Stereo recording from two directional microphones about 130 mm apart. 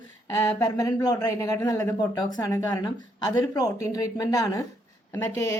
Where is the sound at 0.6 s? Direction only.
30° left (ahead or behind).